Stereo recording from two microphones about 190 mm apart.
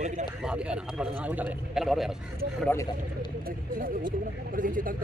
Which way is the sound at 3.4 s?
50° right (ahead or behind).